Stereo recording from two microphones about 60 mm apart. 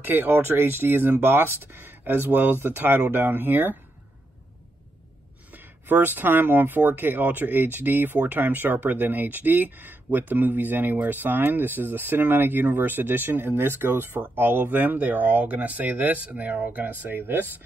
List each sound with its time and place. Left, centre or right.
0.0 s speech: right
5.5 s speech: right